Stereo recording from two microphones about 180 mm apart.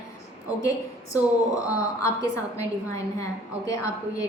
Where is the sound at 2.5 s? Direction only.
15° left (ahead or behind).